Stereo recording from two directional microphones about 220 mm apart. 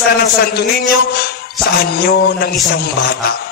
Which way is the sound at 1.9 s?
45° left (ahead or behind).